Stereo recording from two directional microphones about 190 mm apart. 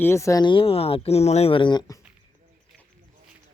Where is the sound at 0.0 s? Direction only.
15° left (ahead or behind).